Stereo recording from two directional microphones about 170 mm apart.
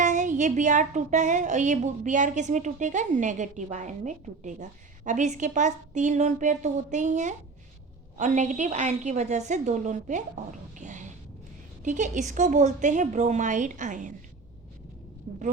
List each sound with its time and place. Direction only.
0.0 s a woman's voice: 50° right (ahead or behind)
10.8 s a sound: 45° right (ahead or behind)
11.8 s a woman's voice: 45° right (ahead or behind)